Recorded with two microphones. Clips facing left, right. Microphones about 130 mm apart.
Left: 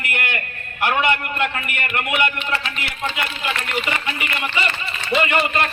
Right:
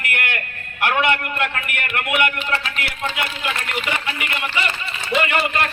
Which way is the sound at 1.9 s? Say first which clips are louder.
Right 1 dB; centre (ahead or behind).